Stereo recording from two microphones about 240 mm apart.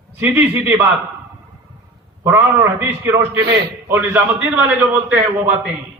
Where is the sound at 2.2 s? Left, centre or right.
Centre.